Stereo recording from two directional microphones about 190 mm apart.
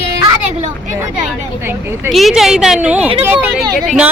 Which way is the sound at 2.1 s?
Centre (ahead or behind).